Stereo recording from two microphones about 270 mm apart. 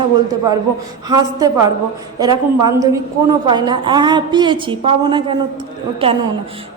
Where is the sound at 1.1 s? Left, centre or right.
Centre.